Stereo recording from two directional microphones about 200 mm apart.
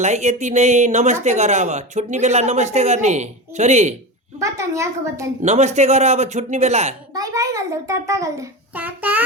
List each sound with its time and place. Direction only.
0.0 s speech: 35° right (ahead or behind)
4.4 s a child's voice: 15° right (ahead or behind)
5.4 s speech: 35° right (ahead or behind)
7.1 s a child's voice: 20° right (ahead or behind)